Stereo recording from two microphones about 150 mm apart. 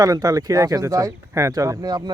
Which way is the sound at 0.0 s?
25° right (ahead or behind).